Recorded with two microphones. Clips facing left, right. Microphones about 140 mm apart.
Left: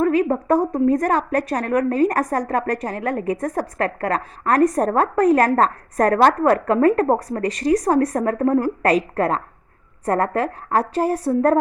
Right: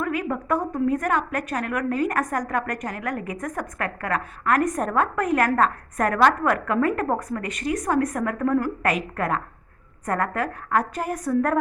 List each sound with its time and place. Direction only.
0.0 s a woman's voice: 35° left (ahead or behind)